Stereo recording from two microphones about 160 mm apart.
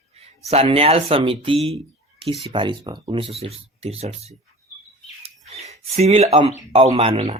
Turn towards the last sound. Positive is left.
turn(degrees=-40)  # may be behind; listen again after turning